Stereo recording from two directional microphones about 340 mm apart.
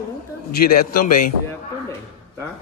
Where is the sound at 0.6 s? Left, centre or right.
Left.